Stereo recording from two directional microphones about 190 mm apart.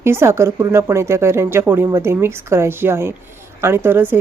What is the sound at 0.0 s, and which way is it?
Speech, 15° right (ahead or behind).